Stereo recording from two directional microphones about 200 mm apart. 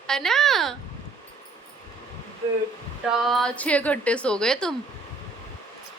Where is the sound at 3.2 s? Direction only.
Centre (ahead or behind).